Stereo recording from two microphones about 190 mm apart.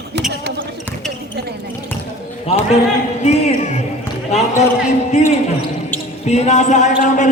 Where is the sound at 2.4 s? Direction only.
35° left (ahead or behind).